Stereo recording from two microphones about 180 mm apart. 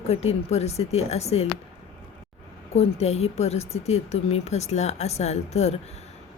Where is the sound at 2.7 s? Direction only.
35° left (ahead or behind).